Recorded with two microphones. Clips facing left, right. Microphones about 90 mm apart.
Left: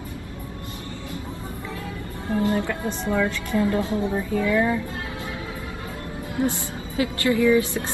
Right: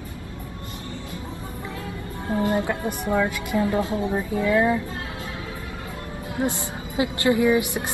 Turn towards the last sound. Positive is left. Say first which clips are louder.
# left 1 dB
turn(degrees=-20)  # may be behind; listen again after turning